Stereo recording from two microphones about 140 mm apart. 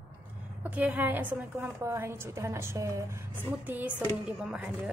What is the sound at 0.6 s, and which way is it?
A woman's voice, 10° right (ahead or behind).